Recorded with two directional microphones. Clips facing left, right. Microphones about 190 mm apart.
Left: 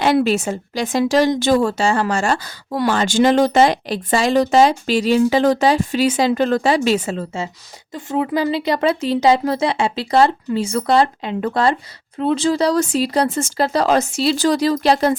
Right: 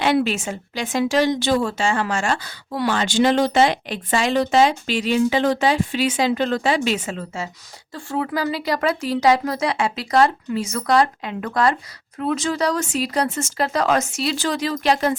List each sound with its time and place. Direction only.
0.0 s speech: 40° left (ahead or behind)